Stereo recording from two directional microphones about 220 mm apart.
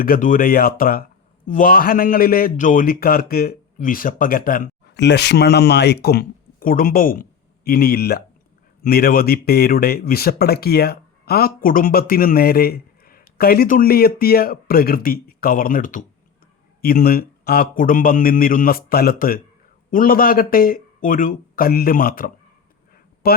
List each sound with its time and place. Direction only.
0.0 s a man's voice: 40° left (ahead or behind)